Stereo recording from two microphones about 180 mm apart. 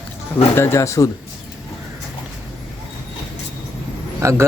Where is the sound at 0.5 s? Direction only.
15° left (ahead or behind).